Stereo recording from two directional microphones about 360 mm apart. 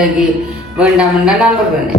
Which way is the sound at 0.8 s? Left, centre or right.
Centre.